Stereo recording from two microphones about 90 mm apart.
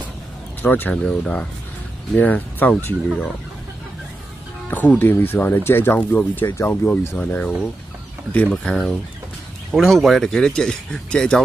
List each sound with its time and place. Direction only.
0.6 s speech: 20° left (ahead or behind)
4.6 s speech: 20° left (ahead or behind)
7.2 s speech: 15° left (ahead or behind)
9.7 s speech: centre (ahead or behind)